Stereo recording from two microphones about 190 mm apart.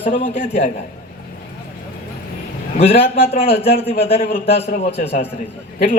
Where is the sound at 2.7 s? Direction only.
30° left (ahead or behind).